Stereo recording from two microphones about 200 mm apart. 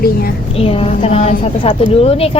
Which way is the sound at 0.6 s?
30° left (ahead or behind).